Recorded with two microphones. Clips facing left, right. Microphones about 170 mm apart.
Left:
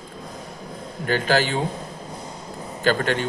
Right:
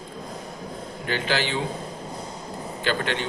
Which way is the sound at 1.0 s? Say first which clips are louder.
Left 5 dB; 45° left (ahead or behind).